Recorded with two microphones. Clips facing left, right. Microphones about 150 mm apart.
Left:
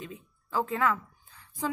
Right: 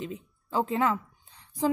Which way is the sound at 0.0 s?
25° right (ahead or behind).